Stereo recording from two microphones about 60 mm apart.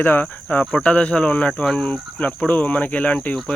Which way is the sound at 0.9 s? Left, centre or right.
Centre.